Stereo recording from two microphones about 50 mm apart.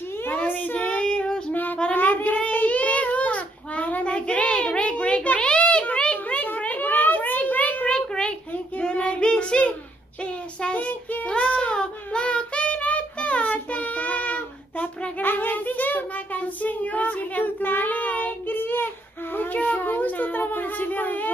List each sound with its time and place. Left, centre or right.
0.5 s child singing: left
0.8 s child singing: centre
1.5 s child singing: left
7.9 s child singing: centre; by 18.9 s left
19.3 s a sound: left